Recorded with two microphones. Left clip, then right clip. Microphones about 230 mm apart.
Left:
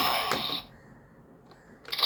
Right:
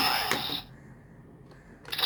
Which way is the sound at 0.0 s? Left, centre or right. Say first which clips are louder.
Even; centre.